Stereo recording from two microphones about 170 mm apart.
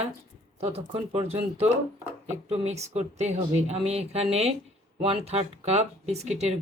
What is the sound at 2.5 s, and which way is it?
Speech, 40° right (ahead or behind).